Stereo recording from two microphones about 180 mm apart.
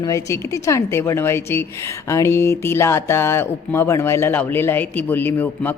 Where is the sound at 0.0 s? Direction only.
15° left (ahead or behind).